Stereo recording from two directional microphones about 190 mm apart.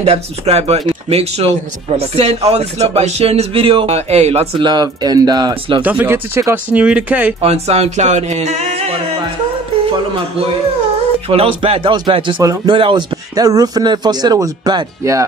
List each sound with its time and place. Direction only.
0.0 s speech: 35° right (ahead or behind)
5.8 s speech: 10° right (ahead or behind)
7.4 s speech: 35° right (ahead or behind)
11.2 s speech: 30° right (ahead or behind)